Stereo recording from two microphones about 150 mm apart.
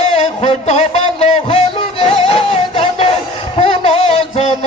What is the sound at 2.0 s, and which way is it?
Music, 35° left (ahead or behind).